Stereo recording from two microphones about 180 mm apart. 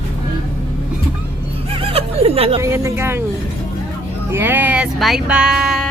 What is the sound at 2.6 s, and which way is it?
Speech, 15° right (ahead or behind).